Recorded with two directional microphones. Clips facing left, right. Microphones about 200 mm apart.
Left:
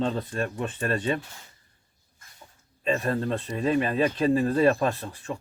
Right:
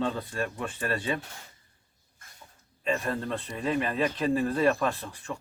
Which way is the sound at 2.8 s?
25° left (ahead or behind).